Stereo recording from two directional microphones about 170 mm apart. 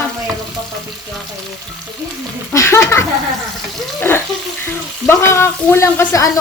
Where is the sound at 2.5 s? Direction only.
15° left (ahead or behind).